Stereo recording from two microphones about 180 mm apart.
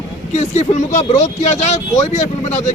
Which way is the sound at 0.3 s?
40° left (ahead or behind).